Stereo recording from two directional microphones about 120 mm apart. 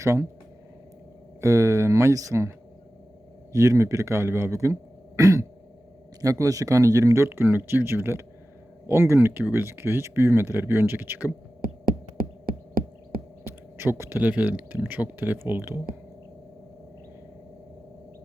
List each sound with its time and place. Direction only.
0.0 s speech: 25° right (ahead or behind)
1.4 s speech: 25° right (ahead or behind)
3.5 s speech: 25° right (ahead or behind)
13.4 s speech: 20° right (ahead or behind)